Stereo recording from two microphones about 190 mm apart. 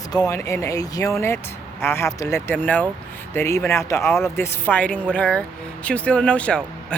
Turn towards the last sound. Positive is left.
turn(degrees=5)  # may be behind; listen again after turning